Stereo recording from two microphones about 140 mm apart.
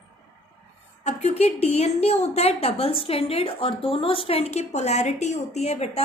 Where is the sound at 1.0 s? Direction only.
50° left (ahead or behind).